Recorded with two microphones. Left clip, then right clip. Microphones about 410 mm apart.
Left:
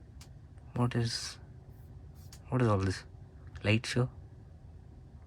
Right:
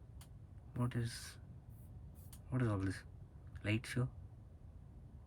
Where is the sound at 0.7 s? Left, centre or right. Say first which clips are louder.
Left 10 dB; centre.